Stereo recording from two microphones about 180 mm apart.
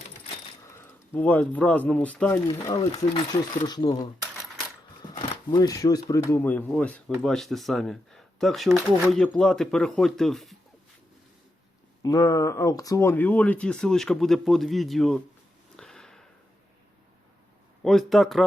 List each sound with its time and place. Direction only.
0.7 s speech: 10° left (ahead or behind)
2.7 s speech: 30° left (ahead or behind)
5.1 s speech: 25° left (ahead or behind); by 10.6 s centre (ahead or behind)
12.0 s speech: 20° left (ahead or behind); by 15.2 s centre (ahead or behind)
15.7 s sniff: 5° left (ahead or behind)
17.8 s speech: centre (ahead or behind)